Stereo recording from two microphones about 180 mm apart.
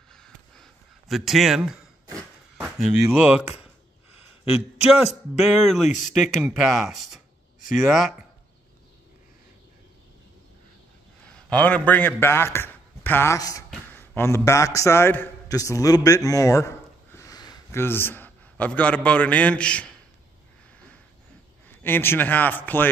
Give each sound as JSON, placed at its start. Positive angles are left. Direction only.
{"t": 0.1, "sound": "a sound", "side_deg": 5}
{"t": 2.5, "sound": "speech", "side_deg": -5}
{"t": 4.9, "sound": "speech", "side_deg": 0}
{"t": 11.2, "sound": "a man's voice", "side_deg": 5}
{"t": 21.6, "sound": "a man's voice", "side_deg": 10}